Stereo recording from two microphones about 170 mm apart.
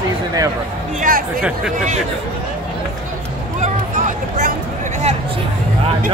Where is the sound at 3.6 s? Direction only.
50° right (ahead or behind).